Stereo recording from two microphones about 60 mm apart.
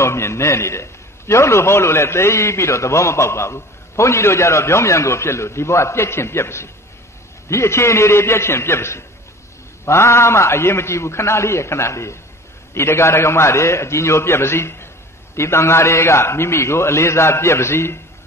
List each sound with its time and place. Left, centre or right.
0.0 s a man's voice: left